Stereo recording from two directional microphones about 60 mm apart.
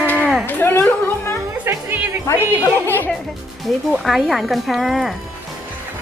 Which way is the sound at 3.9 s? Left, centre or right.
Centre.